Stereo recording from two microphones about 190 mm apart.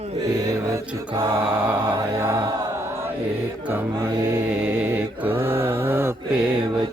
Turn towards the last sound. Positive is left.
turn(degrees=-5)  # may be behind; listen again after turning